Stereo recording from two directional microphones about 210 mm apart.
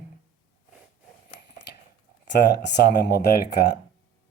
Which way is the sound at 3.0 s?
50° left (ahead or behind).